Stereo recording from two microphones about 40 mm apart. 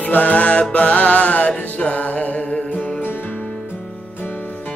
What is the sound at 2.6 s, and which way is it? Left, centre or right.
Music, left.